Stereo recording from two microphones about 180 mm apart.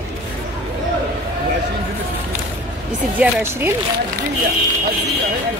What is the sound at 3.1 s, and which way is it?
Speech, 10° right (ahead or behind).